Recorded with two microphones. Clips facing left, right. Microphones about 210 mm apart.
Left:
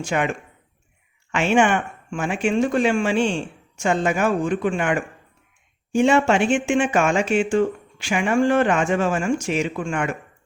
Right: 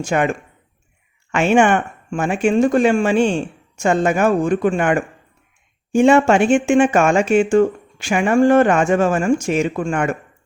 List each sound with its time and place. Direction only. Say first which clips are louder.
0.0 s speech: right 5 dB; 45° right (ahead or behind)